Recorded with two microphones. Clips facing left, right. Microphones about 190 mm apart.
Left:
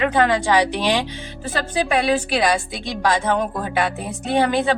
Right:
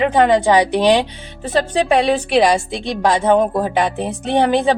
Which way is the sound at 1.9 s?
25° right (ahead or behind).